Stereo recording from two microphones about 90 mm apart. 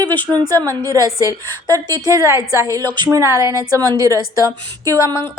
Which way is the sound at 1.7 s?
45° right (ahead or behind).